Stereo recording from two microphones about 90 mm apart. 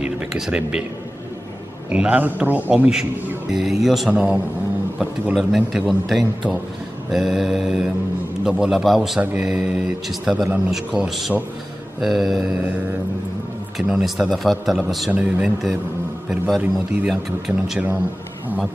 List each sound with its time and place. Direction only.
0.0 s speech: 10° right (ahead or behind)
1.9 s a man's voice: 15° right (ahead or behind)
2.7 s a man's voice: 10° right (ahead or behind)
4.1 s a man's voice: 15° right (ahead or behind)
9.2 s a man's voice: 20° right (ahead or behind)
9.5 s speech: 5° right (ahead or behind)
13.7 s speech: 5° right (ahead or behind)
15.0 s a man's voice: 15° right (ahead or behind)
15.4 s speech: centre (ahead or behind)